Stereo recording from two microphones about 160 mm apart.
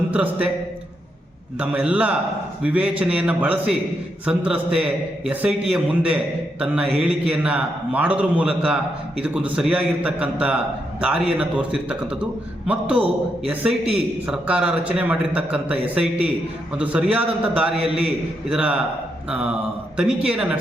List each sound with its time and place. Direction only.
0.1 s a man's voice: 10° right (ahead or behind)
1.5 s a man's voice: 10° right (ahead or behind)
13.7 s a man's voice: 40° right (ahead or behind)
14.3 s a man's voice: 5° right (ahead or behind)